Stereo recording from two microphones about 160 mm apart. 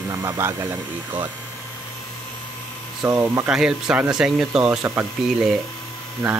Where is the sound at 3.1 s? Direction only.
20° right (ahead or behind).